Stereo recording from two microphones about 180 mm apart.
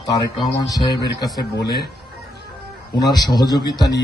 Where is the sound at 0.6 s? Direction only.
20° left (ahead or behind).